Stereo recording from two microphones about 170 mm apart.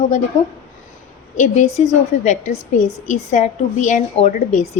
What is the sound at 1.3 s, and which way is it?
A woman's voice, 45° left (ahead or behind).